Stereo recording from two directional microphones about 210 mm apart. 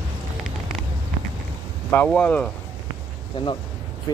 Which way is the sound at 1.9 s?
5° left (ahead or behind).